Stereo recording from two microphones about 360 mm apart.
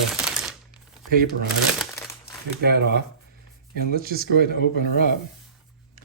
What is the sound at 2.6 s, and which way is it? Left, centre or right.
Speech, right.